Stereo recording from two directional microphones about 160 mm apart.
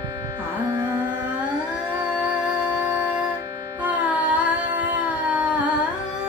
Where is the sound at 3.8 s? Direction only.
10° right (ahead or behind).